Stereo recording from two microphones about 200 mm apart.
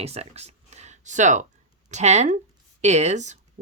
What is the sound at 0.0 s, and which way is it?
Speech, 30° right (ahead or behind).